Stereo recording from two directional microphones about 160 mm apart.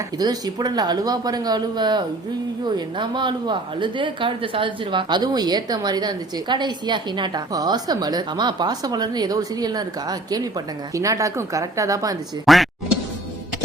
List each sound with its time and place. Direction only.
0.2 s a woman's voice: 25° right (ahead or behind)
12.5 s speech: centre (ahead or behind)